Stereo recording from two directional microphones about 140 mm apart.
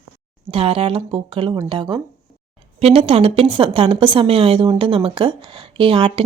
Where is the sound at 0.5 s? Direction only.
40° right (ahead or behind).